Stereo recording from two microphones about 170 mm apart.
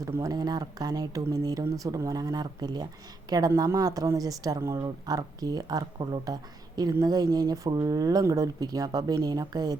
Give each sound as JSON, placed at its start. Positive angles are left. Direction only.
{"t": 0.0, "sound": "speech", "side_deg": -20}